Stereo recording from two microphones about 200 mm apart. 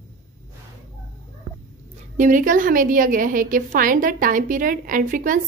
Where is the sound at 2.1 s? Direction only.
40° right (ahead or behind).